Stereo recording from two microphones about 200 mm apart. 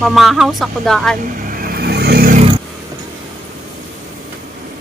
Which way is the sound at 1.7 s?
50° right (ahead or behind).